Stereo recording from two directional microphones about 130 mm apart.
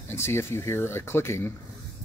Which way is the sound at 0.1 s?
20° left (ahead or behind).